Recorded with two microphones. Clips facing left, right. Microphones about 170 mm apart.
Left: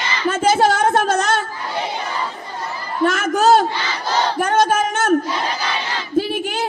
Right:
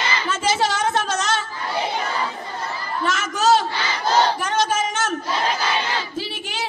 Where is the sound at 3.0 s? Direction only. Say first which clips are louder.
Left 5 dB; 55° left (ahead or behind).